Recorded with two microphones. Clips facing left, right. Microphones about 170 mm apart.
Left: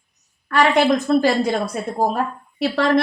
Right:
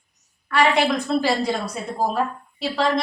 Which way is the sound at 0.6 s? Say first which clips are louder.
Left 3 dB; 45° left (ahead or behind).